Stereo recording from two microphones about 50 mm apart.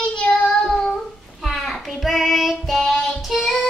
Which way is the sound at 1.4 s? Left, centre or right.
Centre.